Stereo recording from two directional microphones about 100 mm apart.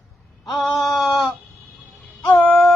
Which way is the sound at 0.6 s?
Centre (ahead or behind).